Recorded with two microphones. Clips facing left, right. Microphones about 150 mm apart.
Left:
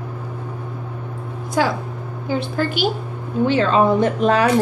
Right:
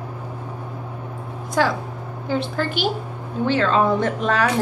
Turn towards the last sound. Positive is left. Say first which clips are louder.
# left 4 dB
turn(degrees=15)  # may be behind; listen again after turning